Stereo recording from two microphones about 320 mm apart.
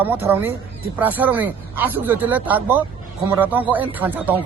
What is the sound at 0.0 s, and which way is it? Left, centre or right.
Speech, centre.